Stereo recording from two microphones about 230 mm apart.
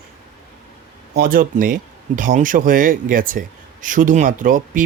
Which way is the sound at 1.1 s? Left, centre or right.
Right.